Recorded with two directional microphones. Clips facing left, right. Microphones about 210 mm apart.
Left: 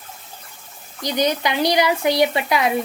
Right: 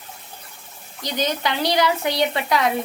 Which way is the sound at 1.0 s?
15° left (ahead or behind).